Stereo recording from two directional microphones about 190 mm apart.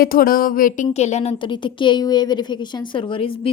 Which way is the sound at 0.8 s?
35° left (ahead or behind).